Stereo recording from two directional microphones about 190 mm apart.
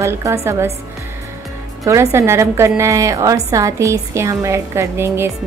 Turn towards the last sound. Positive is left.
turn(degrees=-15)  # may be behind; listen again after turning